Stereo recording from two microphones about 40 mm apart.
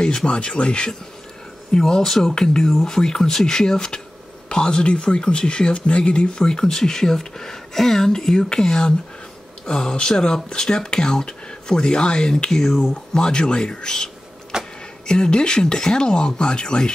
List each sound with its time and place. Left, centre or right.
0.0 s speech: centre
1.7 s speech: centre
12.4 s speech: centre
12.9 s speech: centre
14.5 s power windows: centre
15.0 s speech: left